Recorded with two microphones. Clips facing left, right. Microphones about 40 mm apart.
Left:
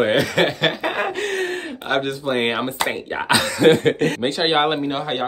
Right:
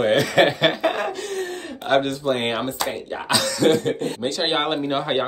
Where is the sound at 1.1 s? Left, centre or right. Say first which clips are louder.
Left 5 dB; left.